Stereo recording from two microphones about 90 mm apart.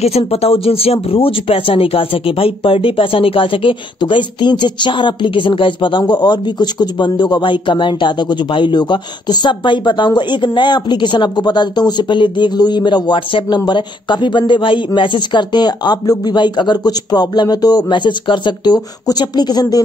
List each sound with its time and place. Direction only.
0.3 s speech: 90° left; by 19.8 s 45° left (ahead or behind)